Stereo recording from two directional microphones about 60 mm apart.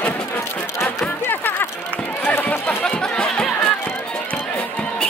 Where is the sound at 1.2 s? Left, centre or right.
Left.